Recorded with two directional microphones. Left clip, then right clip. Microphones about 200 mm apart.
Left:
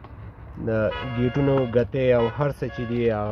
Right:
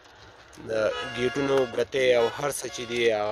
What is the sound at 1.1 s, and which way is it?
Speech, 20° right (ahead or behind).